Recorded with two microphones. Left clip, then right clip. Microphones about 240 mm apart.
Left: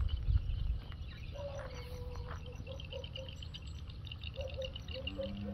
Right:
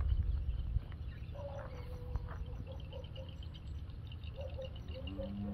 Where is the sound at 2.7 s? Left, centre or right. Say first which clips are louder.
Left 7 dB; left.